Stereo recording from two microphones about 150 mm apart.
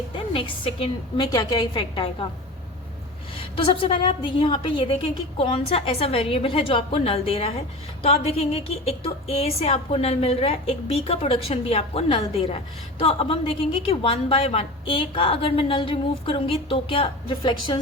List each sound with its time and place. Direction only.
0.3 s a woman's voice: 35° left (ahead or behind)
3.5 s a woman's voice: 35° left (ahead or behind)